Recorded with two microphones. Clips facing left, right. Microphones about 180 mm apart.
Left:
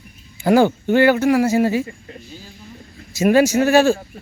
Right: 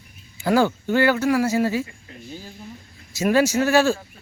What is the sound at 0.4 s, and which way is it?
Speech, 20° left (ahead or behind).